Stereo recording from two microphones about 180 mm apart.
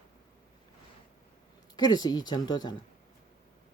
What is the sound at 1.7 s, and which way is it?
Speech, 20° left (ahead or behind).